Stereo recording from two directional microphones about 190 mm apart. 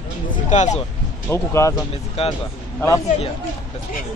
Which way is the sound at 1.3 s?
15° left (ahead or behind).